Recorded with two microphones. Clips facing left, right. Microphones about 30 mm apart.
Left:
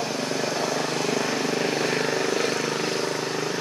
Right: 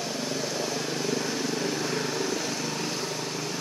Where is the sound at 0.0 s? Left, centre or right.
Left.